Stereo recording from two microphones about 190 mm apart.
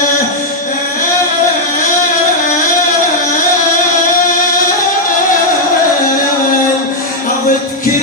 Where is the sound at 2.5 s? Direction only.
45° left (ahead or behind).